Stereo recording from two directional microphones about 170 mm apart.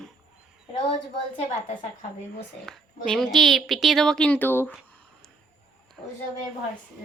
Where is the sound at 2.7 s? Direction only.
5° left (ahead or behind).